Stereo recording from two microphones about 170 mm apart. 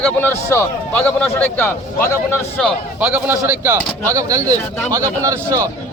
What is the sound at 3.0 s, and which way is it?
A man's voice, 10° right (ahead or behind).